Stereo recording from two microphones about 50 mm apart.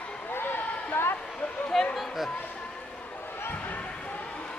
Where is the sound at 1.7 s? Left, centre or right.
Centre.